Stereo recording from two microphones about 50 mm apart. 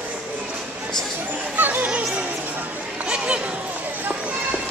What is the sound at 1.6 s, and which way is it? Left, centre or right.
Children playing, right.